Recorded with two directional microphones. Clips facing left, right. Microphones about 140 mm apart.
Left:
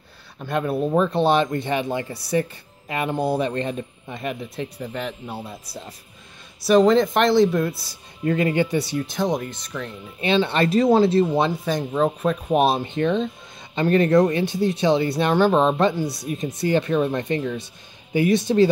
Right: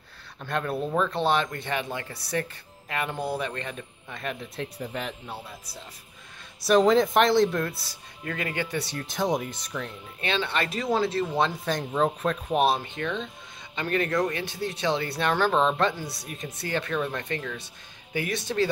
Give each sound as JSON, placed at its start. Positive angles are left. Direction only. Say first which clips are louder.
{"t": 0.4, "sound": "speech", "louder": "left 6 dB", "side_deg": 10}
{"t": 4.2, "sound": "speech", "louder": "left 5 dB", "side_deg": 15}
{"t": 4.6, "sound": "speech", "louder": "left 4 dB", "side_deg": 0}
{"t": 5.4, "sound": "speech", "louder": "left 7 dB", "side_deg": 40}
{"t": 6.6, "sound": "speech", "louder": "left 4 dB", "side_deg": 0}
{"t": 8.2, "sound": "speech", "louder": "left 11 dB", "side_deg": 25}
{"t": 8.6, "sound": "speech", "louder": "left 8 dB", "side_deg": 10}
{"t": 10.2, "sound": "speech", "louder": "left 8 dB", "side_deg": 20}
{"t": 10.5, "sound": "speech", "louder": "left 11 dB", "side_deg": 35}
{"t": 11.3, "sound": "speech", "louder": "left 5 dB", "side_deg": 10}
{"t": 12.4, "sound": "speech", "louder": "left 4 dB", "side_deg": 20}